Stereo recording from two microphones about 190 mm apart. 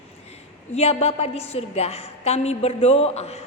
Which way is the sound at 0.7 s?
35° left (ahead or behind).